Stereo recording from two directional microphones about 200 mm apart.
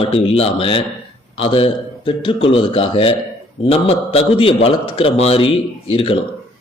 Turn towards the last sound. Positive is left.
turn(degrees=25)  # may be behind; listen again after turning